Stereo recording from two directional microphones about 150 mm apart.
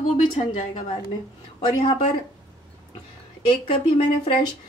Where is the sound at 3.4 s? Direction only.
35° left (ahead or behind).